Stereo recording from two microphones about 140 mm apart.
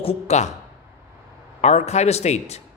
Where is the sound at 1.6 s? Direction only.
50° left (ahead or behind).